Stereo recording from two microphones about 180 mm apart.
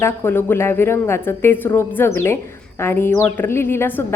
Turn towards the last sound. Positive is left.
turn(degrees=15)  # may be behind; listen again after turning